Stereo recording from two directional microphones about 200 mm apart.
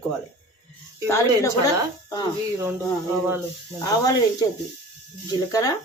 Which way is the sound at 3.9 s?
20° left (ahead or behind).